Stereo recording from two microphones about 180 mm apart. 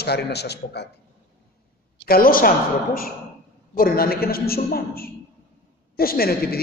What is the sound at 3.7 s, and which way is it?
A man's voice, 55° left (ahead or behind).